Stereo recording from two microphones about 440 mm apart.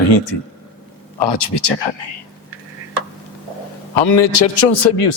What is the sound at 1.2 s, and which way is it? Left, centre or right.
Speech, left.